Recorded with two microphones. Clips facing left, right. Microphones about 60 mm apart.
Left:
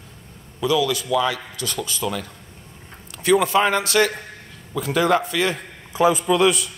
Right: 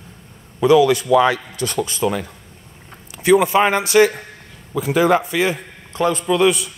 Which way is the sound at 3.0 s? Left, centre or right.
Centre.